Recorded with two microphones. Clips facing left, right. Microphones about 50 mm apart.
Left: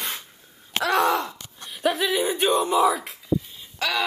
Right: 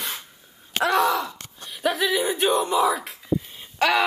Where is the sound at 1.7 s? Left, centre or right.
Centre.